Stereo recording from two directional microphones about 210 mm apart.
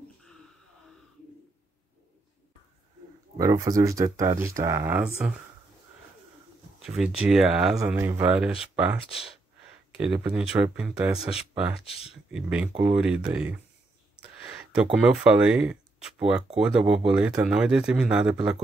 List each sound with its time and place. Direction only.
3.3 s speech: 15° right (ahead or behind)
6.8 s speech: centre (ahead or behind)
11.8 s speech: 30° left (ahead or behind)
12.3 s speech: 5° right (ahead or behind)